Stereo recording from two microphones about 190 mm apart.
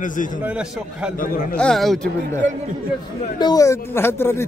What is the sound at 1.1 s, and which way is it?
Speech, 45° left (ahead or behind).